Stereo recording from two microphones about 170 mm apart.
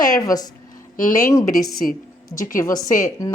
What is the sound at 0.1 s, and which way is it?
Speech, 20° left (ahead or behind).